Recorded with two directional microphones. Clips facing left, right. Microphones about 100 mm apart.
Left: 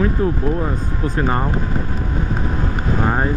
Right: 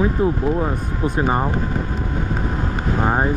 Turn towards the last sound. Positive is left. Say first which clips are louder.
# even
turn(degrees=-15)  # may be behind; listen again after turning